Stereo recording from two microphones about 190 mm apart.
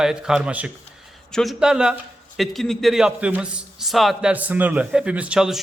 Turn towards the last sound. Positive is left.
turn(degrees=-5)  # may be behind; listen again after turning